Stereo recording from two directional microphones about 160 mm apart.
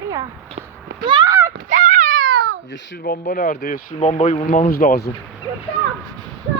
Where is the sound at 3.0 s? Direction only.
65° left (ahead or behind).